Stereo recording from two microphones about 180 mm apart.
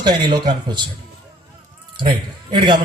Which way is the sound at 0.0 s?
25° right (ahead or behind).